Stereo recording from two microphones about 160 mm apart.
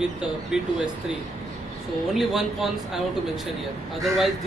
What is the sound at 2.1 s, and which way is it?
Speech, centre (ahead or behind).